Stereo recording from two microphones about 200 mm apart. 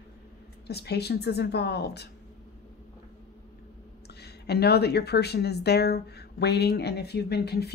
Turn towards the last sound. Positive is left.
turn(degrees=55)  # may be behind; listen again after turning